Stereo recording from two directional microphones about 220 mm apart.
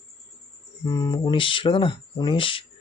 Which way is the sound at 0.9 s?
15° left (ahead or behind).